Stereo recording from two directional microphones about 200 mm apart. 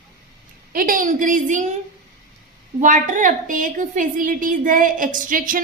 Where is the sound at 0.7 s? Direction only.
45° right (ahead or behind).